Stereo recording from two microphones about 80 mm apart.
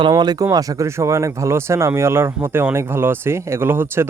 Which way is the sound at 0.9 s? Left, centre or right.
Right.